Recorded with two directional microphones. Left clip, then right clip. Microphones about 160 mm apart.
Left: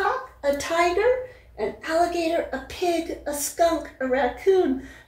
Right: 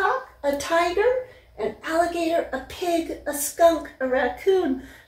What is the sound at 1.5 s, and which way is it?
Speech, 15° left (ahead or behind).